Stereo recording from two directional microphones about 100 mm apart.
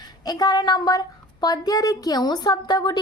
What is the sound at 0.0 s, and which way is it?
A woman's voice, 40° left (ahead or behind).